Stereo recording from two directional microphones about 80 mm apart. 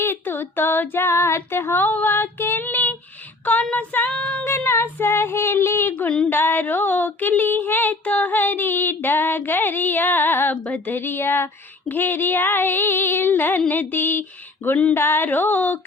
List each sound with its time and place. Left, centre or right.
0.0 s female singing: left
4.4 s yodeling: left
6.0 s female singing: left